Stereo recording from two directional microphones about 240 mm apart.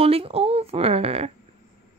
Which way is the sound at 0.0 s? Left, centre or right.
Right.